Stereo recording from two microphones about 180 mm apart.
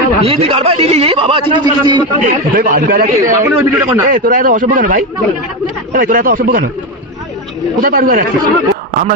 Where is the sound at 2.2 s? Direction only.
50° right (ahead or behind).